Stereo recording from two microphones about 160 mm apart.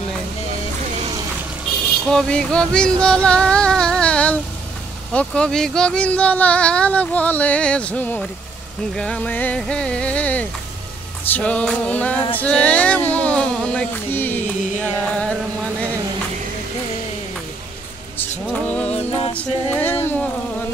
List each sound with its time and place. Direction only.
2.0 s a sound: 5° left (ahead or behind)
3.3 s female singing: 5° left (ahead or behind)
5.1 s speech: 5° left (ahead or behind)
12.4 s a sound: 5° left (ahead or behind)
18.5 s music: 10° left (ahead or behind)
19.3 s a capella: 10° left (ahead or behind)